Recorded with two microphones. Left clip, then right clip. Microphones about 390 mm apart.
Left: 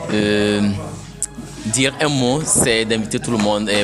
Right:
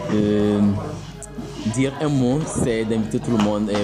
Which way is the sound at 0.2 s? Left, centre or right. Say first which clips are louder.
Left 3 dB; left.